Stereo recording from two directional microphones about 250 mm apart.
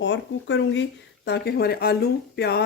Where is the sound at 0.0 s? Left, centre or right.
Left.